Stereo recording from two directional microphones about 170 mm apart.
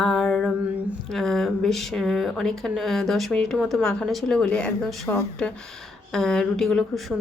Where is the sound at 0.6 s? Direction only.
10° right (ahead or behind).